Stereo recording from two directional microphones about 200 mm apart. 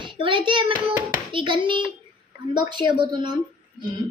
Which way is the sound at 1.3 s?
25° right (ahead or behind).